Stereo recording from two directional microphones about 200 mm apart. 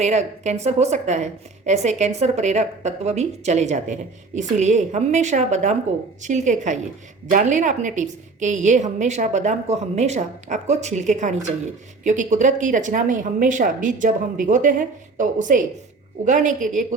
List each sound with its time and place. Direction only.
0.0 s a woman's voice: 35° right (ahead or behind)